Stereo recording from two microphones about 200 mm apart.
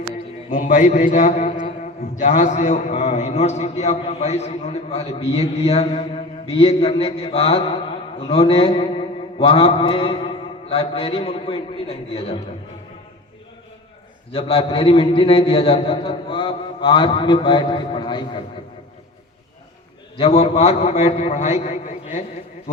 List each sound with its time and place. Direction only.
0.5 s a man's voice: 35° left (ahead or behind)
14.3 s a man's voice: 25° left (ahead or behind)
20.1 s a man's voice: 30° left (ahead or behind)